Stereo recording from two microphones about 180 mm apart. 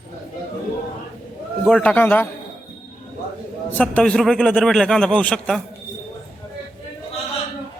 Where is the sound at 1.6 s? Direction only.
5° left (ahead or behind).